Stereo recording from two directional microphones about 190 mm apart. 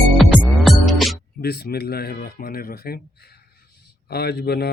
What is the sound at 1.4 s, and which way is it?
Speech, 55° left (ahead or behind).